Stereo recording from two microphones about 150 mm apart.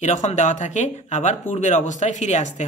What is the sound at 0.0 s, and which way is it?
Speech, 55° left (ahead or behind).